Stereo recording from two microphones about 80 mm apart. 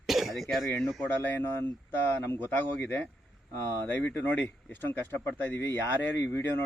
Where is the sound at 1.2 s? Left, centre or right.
Left.